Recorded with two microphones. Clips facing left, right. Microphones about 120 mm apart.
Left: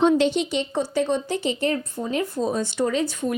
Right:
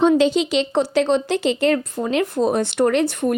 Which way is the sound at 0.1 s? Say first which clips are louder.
Right 4 dB; 90° right.